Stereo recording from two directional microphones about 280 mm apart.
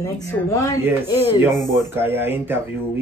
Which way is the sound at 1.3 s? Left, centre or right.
Centre.